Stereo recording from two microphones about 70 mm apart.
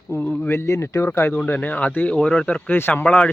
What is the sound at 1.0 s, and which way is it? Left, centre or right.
Speech, left.